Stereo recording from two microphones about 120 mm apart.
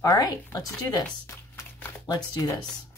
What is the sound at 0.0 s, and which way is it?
Speech, 30° left (ahead or behind).